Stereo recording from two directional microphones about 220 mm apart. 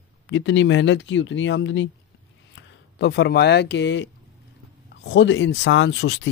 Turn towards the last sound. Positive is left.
turn(degrees=55)  # may be behind; listen again after turning